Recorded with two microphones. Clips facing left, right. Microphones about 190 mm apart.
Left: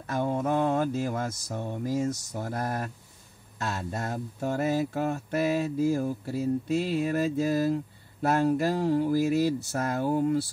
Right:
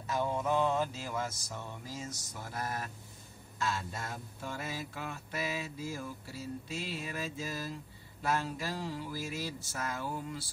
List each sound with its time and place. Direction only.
0.0 s mantra: 55° left (ahead or behind)
4.4 s mantra: 45° left (ahead or behind); by 9.8 s 60° left (ahead or behind)
9.9 s speech: 50° left (ahead or behind)